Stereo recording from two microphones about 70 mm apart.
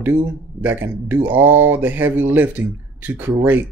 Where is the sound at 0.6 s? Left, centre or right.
Right.